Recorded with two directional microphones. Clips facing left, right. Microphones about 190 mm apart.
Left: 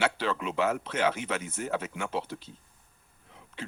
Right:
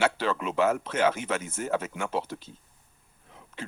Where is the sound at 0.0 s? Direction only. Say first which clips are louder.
Right 2 dB; 45° right (ahead or behind).